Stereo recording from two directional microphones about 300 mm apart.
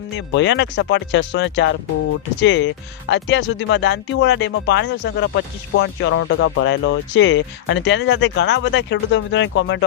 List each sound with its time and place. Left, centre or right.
0.2 s speech: left